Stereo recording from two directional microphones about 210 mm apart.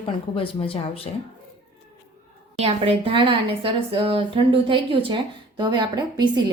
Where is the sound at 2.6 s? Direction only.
25° right (ahead or behind).